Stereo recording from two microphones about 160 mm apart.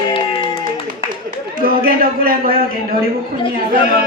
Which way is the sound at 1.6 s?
65° right (ahead or behind).